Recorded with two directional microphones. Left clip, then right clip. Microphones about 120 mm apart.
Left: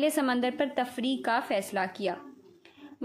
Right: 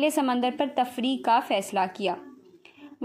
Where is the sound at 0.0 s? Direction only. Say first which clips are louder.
Right 3 dB; 10° right (ahead or behind).